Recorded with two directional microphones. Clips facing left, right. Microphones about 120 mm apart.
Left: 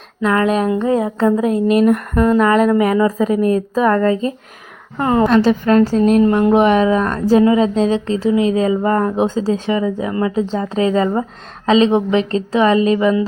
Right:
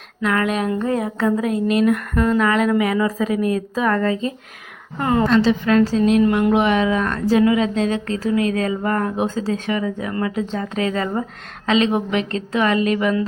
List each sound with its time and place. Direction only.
0.2 s a woman's voice: 30° left (ahead or behind)
5.3 s a woman's voice: 50° left (ahead or behind); by 13.2 s 25° left (ahead or behind)